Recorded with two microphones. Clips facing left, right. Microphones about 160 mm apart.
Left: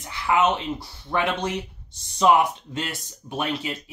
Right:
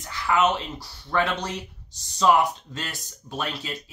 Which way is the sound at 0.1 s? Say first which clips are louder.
Left 1 dB; 25° left (ahead or behind).